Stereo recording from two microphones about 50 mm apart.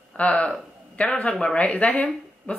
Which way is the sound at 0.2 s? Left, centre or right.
Left.